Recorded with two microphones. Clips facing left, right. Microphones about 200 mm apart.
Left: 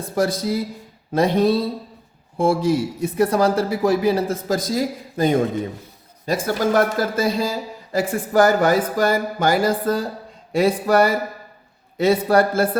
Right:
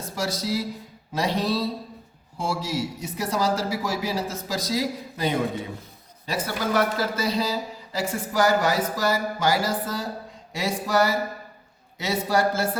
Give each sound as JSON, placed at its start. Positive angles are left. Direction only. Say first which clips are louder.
{"t": 0.0, "sound": "speech", "louder": "left 8 dB", "side_deg": 55}